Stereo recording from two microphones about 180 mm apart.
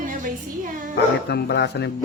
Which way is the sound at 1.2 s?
65° left (ahead or behind).